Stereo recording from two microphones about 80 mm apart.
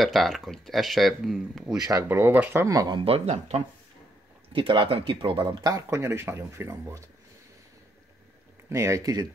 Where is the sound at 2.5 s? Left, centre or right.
Right.